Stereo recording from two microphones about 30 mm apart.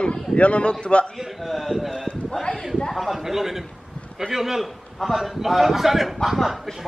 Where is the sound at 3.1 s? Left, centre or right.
Centre.